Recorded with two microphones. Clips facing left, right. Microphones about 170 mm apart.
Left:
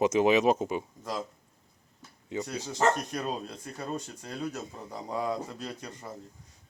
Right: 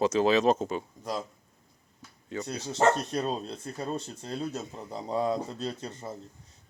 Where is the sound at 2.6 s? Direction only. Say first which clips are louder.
Right 3 dB; 25° right (ahead or behind).